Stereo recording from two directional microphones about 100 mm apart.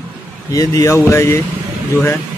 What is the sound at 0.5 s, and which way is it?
Speech, 35° left (ahead or behind).